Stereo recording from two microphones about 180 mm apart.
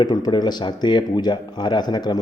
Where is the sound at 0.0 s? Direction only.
25° left (ahead or behind).